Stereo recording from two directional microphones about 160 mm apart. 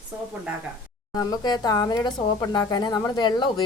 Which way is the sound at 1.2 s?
25° left (ahead or behind).